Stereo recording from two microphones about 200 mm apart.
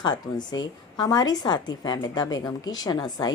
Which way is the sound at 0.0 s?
20° left (ahead or behind).